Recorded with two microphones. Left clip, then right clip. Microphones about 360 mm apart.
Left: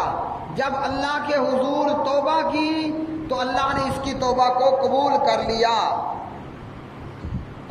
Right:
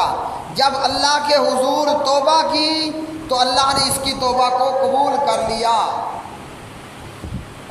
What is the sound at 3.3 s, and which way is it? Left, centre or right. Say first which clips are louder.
A man's voice: right 7 dB; centre.